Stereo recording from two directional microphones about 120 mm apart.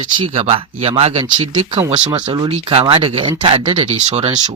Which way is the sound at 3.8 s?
60° right (ahead or behind).